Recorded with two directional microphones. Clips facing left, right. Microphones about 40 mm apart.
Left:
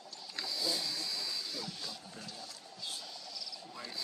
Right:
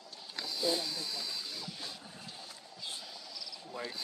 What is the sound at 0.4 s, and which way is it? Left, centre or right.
Speech, right.